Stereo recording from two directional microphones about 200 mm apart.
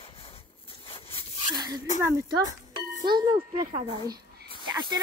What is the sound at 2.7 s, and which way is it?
Speech, 20° right (ahead or behind).